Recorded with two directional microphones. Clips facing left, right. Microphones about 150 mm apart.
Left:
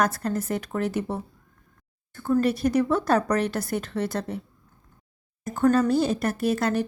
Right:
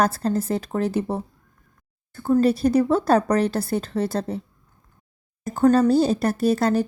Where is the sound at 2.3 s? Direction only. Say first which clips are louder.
Right 4 dB; 30° right (ahead or behind).